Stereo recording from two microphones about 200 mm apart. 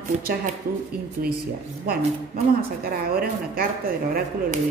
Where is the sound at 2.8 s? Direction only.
50° right (ahead or behind).